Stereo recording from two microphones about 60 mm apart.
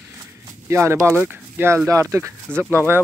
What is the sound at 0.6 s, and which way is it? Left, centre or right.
Speech, right.